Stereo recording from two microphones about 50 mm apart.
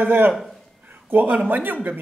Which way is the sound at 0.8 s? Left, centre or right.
Right.